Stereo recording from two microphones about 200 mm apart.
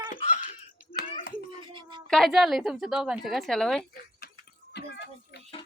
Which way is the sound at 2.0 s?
Centre (ahead or behind).